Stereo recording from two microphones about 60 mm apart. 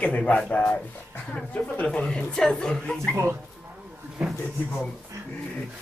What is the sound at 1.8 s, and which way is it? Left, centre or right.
Speech, centre.